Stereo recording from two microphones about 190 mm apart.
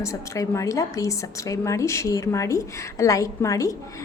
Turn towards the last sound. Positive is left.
turn(degrees=15)  # may be behind; listen again after turning